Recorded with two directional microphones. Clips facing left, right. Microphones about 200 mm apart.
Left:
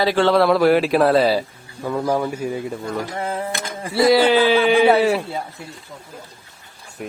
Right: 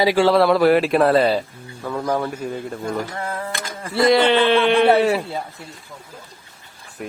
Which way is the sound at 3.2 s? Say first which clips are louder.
Left 3 dB; 20° left (ahead or behind).